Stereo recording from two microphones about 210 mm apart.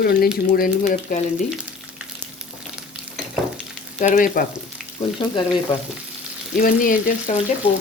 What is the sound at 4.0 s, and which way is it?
Frying, 40° left (ahead or behind).